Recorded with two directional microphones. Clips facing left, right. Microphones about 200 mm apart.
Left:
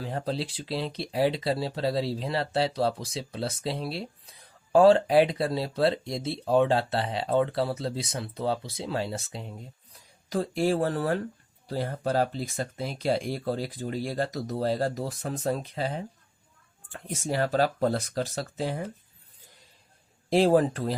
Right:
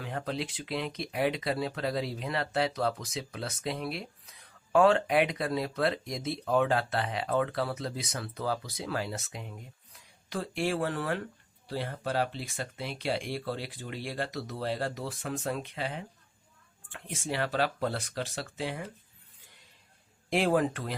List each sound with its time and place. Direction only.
0.0 s speech: 30° left (ahead or behind)
20.3 s speech: 35° left (ahead or behind)